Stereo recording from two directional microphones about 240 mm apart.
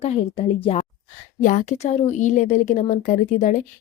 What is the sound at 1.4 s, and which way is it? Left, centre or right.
A woman's voice, left.